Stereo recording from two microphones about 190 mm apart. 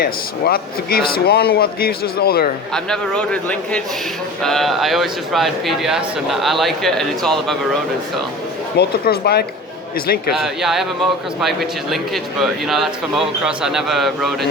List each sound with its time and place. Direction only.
0.0 s a man's voice: 50° left (ahead or behind)
2.7 s a man's voice: 5° left (ahead or behind)
8.8 s a man's voice: 55° left (ahead or behind)
10.3 s a man's voice: centre (ahead or behind)